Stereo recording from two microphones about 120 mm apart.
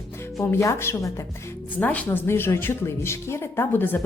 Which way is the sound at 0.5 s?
25° left (ahead or behind).